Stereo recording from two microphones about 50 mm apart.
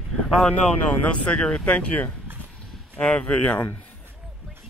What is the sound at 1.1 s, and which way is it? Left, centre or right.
Speech, left.